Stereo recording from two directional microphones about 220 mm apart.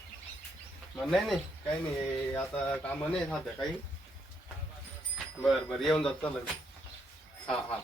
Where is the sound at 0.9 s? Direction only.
Centre (ahead or behind).